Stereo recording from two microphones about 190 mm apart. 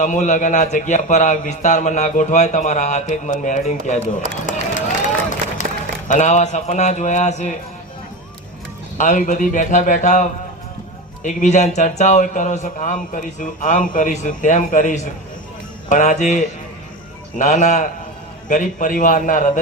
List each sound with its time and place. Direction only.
0.0 s a man's voice: 40° left (ahead or behind)
4.4 s run: 40° left (ahead or behind)
6.1 s a man's voice: 40° left (ahead or behind)
9.0 s a man's voice: 40° left (ahead or behind)